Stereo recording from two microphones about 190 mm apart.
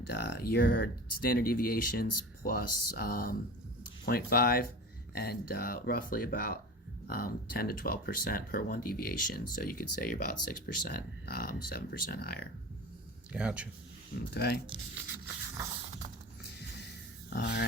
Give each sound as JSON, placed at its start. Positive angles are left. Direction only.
{"t": 0.1, "sound": "speech", "side_deg": 60}
{"t": 13.3, "sound": "speech", "side_deg": -5}
{"t": 14.3, "sound": "speech", "side_deg": 60}
{"t": 17.2, "sound": "a sound", "side_deg": 60}